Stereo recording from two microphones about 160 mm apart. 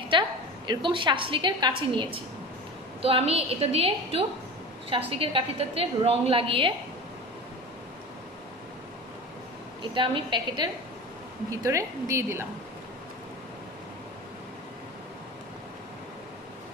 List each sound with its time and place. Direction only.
0.1 s a sound: 30° right (ahead or behind)
0.7 s a woman's voice: 30° right (ahead or behind)
9.9 s a woman's voice: 30° right (ahead or behind)
11.5 s a woman's voice: 20° right (ahead or behind)